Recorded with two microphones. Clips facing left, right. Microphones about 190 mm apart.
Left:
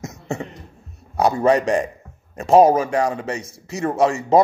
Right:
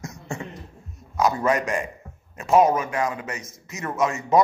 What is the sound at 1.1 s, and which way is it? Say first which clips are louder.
Speech: left 5 dB; 35° left (ahead or behind).